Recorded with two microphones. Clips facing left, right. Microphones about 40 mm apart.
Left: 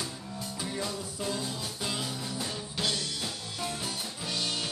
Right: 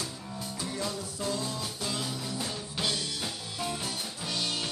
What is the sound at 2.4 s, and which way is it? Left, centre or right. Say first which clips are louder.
Music: left 1 dB; centre.